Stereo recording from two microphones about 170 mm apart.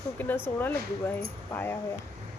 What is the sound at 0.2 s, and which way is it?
Speech, 10° left (ahead or behind).